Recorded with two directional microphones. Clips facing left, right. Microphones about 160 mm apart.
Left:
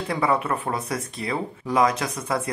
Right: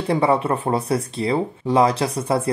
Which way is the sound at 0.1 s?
30° right (ahead or behind).